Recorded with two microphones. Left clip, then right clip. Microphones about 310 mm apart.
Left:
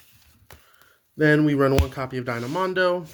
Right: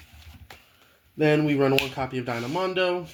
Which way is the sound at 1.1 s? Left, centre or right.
Left.